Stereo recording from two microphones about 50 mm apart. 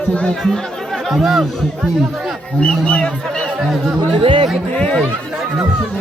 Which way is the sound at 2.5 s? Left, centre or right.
Left.